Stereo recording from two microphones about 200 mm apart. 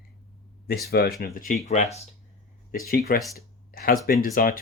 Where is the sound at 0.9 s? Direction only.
50° left (ahead or behind).